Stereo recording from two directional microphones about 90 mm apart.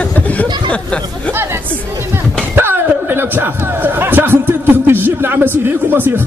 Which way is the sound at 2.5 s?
25° right (ahead or behind).